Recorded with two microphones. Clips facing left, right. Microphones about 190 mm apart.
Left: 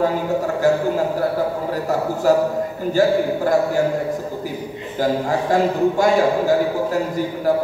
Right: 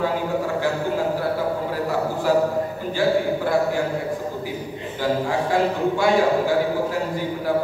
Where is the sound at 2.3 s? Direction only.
45° left (ahead or behind).